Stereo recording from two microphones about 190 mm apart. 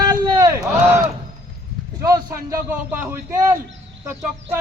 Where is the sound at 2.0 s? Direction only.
15° right (ahead or behind).